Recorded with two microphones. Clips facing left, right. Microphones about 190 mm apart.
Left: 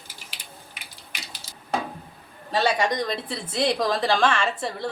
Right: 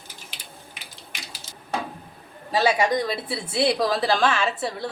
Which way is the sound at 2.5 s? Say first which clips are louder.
Right 2 dB; 5° right (ahead or behind).